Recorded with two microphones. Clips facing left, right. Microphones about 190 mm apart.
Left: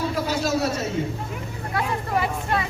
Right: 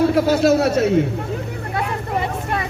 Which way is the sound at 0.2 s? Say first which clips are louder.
Right 8 dB; 65° right (ahead or behind).